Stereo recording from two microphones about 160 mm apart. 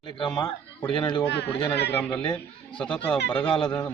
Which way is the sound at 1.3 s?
90° left.